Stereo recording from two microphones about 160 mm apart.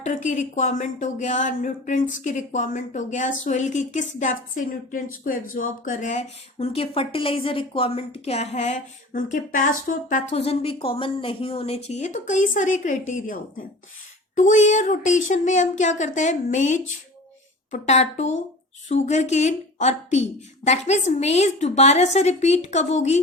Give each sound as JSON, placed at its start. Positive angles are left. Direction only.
{"t": 0.0, "sound": "speech", "side_deg": 50}